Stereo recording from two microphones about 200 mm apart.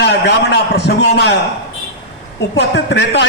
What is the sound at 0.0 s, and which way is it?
A man's voice, 55° left (ahead or behind).